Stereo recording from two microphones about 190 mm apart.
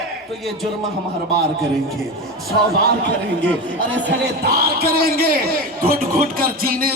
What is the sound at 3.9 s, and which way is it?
A man's voice, 55° right (ahead or behind).